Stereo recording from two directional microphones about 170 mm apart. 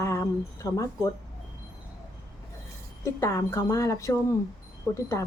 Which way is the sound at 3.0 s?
15° left (ahead or behind).